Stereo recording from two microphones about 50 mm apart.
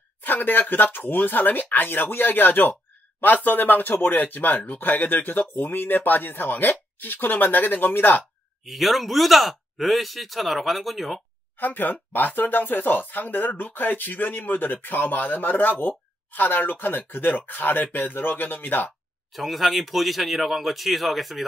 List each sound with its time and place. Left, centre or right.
0.2 s speech: left
8.6 s speech: centre
11.5 s speech: left
19.3 s speech: centre